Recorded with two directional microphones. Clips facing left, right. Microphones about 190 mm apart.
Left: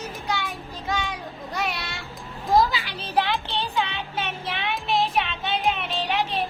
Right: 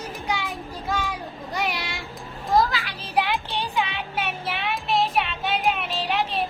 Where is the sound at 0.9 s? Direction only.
5° right (ahead or behind).